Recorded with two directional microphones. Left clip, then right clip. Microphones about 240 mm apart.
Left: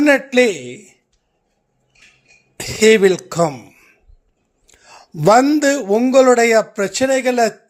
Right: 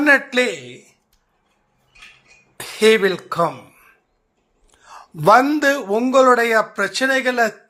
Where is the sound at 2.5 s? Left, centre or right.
Left.